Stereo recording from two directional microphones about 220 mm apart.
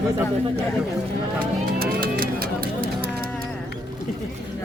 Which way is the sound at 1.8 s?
40° right (ahead or behind).